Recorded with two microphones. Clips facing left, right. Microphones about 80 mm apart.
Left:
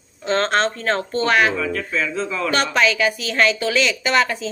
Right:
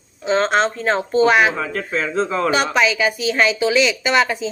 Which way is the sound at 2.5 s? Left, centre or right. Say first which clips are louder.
Left 1 dB; centre.